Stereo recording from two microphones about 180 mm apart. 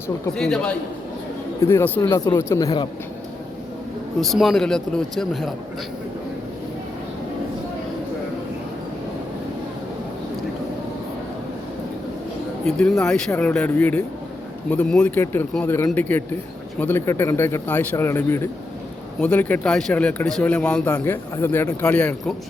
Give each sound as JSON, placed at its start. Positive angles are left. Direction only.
{"t": 0.3, "sound": "speech", "side_deg": 5}
{"t": 1.6, "sound": "a man's voice", "side_deg": 15}
{"t": 4.2, "sound": "speech", "side_deg": 0}
{"t": 12.6, "sound": "a man's voice", "side_deg": 5}